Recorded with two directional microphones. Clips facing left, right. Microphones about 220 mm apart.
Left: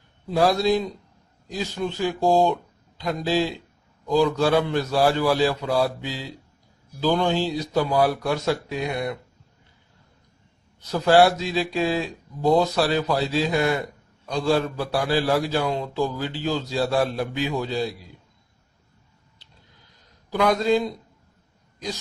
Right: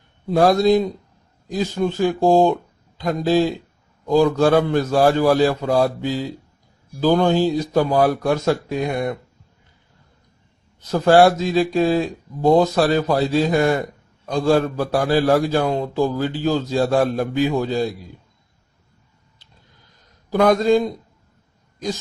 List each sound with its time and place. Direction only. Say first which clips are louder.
0.3 s a man's voice: right 5 dB; 50° right (ahead or behind)
10.9 s a man's voice: right 4 dB; 45° right (ahead or behind)
20.3 s a man's voice: right 5 dB; 45° right (ahead or behind)